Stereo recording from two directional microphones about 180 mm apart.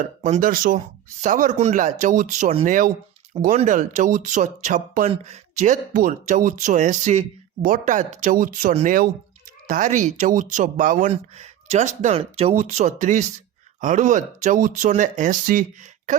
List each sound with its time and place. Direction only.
0.0 s speech: 45° right (ahead or behind)
2.6 s speech: 50° right (ahead or behind)